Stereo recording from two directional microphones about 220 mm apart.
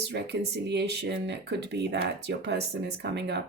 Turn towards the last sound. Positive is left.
turn(degrees=-50)  # may be behind; listen again after turning